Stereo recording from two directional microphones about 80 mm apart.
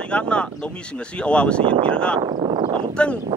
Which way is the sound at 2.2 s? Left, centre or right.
Right.